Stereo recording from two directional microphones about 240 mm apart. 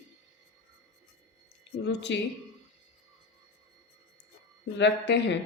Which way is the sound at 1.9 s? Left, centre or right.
Left.